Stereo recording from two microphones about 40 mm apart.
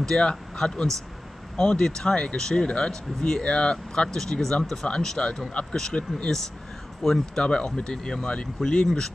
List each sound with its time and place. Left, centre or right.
0.0 s speech: centre
5.5 s speech: left
7.0 s speech: centre
7.4 s speech: left